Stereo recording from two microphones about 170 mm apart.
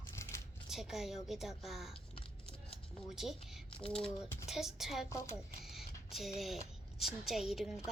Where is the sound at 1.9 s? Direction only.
35° left (ahead or behind).